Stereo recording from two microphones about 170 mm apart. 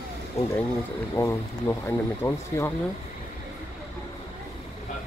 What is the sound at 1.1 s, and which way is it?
Speech, 15° left (ahead or behind).